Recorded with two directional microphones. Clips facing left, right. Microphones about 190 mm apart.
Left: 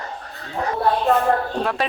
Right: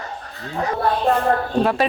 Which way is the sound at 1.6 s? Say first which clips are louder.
Right 4 dB; 5° right (ahead or behind).